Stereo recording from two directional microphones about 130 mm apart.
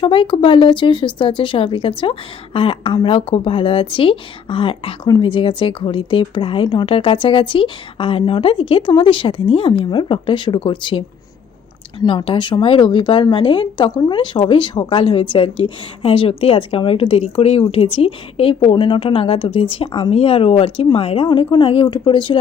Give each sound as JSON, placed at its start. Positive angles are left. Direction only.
{"t": 0.0, "sound": "speech", "side_deg": 40}